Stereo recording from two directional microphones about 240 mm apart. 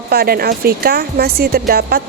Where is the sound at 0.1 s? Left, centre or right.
Right.